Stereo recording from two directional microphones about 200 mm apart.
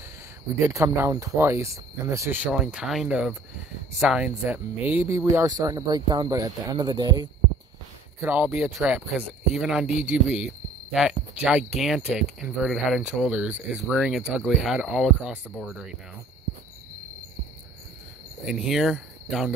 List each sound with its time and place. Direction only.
0.6 s speech: 15° right (ahead or behind)
8.2 s speech: 10° right (ahead or behind)
10.4 s a sound: 5° right (ahead or behind)
11.4 s speech: 5° right (ahead or behind)
18.4 s speech: centre (ahead or behind)